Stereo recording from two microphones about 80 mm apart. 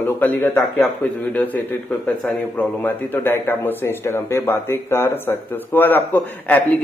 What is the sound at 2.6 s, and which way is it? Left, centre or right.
A man's voice, left.